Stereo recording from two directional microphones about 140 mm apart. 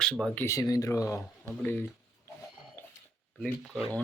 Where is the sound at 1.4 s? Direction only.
10° left (ahead or behind).